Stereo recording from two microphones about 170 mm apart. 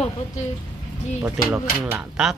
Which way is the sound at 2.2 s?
5° right (ahead or behind).